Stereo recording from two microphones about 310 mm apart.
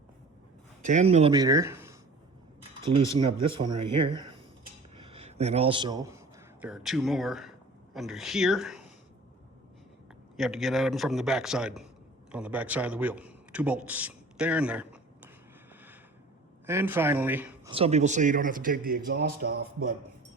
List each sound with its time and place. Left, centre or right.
0.9 s speech: right
2.8 s speech: right
3.5 s a man's voice: centre
10.3 s a man's voice: centre
16.6 s speech: centre
17.7 s a man's voice: centre